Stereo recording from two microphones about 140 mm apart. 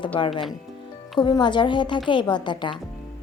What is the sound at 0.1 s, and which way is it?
A woman's voice, 35° left (ahead or behind).